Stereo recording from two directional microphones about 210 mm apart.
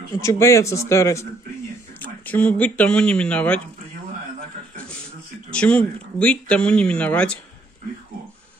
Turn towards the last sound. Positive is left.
turn(degrees=5)  # may be behind; listen again after turning